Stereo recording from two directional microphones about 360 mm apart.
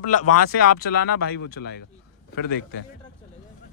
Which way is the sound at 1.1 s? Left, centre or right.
Left.